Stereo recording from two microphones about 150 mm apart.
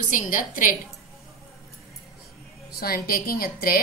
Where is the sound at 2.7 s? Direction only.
85° left.